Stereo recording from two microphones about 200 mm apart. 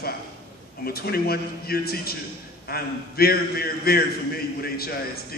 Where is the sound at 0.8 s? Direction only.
50° left (ahead or behind).